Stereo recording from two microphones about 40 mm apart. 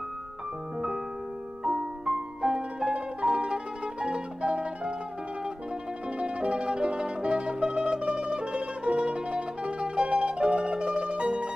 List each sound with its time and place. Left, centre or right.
1.6 s music: centre
6.1 s music: right